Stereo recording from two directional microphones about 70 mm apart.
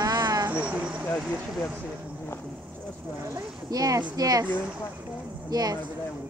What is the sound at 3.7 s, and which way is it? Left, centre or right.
Speech, right.